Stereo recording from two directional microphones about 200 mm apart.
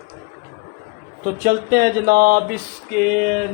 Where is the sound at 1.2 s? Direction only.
45° right (ahead or behind).